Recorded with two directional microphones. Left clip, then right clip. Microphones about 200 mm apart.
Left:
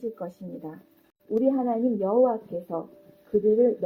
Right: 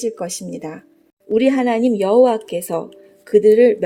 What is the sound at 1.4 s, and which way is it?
Speech, 70° right (ahead or behind).